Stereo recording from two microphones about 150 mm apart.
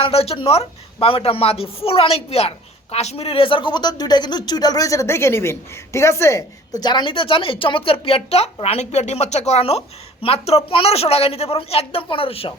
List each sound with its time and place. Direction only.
0.0 s a woman's voice: 40° left (ahead or behind)